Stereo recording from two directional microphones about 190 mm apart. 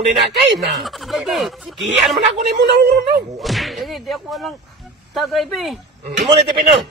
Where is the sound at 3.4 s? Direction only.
Centre (ahead or behind).